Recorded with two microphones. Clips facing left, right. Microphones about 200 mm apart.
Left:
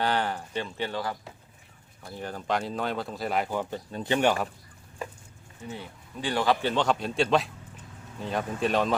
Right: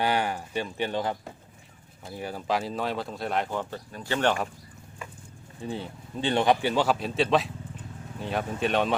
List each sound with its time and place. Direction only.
0.0 s a sound: 10° right (ahead or behind)
2.1 s speech: 10° right (ahead or behind); by 4.4 s 15° left (ahead or behind)
5.6 s a man's voice: 30° right (ahead or behind); by 9.0 s centre (ahead or behind)